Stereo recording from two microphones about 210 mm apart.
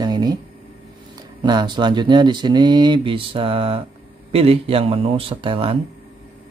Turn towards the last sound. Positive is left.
turn(degrees=-25)  # may be behind; listen again after turning